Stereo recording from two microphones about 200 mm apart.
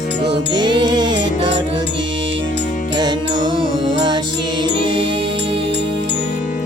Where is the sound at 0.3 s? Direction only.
20° right (ahead or behind).